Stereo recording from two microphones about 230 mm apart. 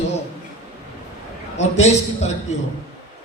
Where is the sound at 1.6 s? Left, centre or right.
Left.